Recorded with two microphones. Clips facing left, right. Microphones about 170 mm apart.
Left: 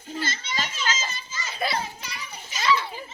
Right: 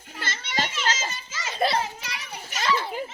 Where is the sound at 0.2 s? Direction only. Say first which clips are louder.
Right 2 dB; 70° right (ahead or behind).